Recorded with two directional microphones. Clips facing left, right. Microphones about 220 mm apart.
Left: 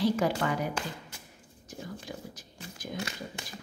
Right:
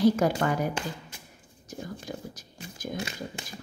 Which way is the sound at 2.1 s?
45° right (ahead or behind).